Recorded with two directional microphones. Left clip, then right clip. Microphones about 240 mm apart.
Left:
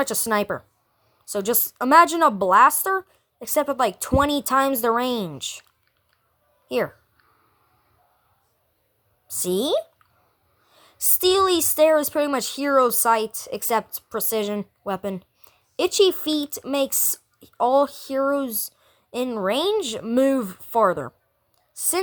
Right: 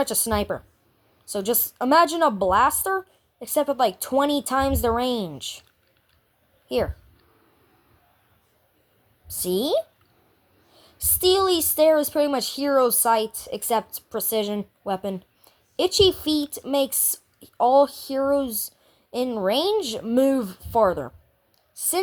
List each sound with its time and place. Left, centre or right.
0.0 s speech: left
6.7 s speech: left
9.2 s speech: left
11.2 s speech: left